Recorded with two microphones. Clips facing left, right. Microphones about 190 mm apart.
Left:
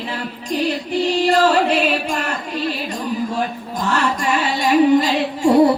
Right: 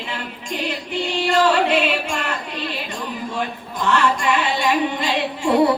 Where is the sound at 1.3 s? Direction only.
40° left (ahead or behind).